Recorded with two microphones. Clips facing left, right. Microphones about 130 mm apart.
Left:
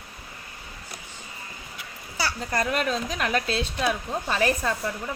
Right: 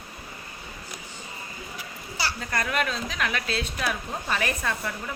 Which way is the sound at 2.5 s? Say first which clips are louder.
Left 3 dB; 35° left (ahead or behind).